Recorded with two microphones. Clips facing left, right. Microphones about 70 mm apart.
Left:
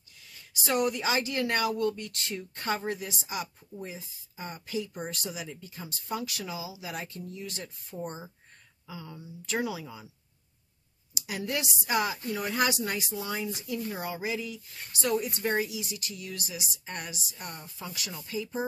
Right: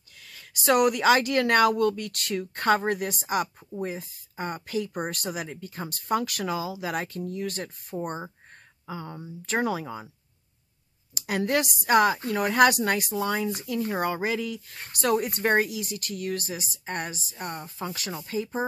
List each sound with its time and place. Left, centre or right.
0.2 s a woman's voice: right
11.1 s speech: right